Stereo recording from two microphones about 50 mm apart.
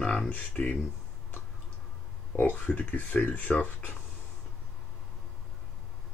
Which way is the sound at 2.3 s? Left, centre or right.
Left.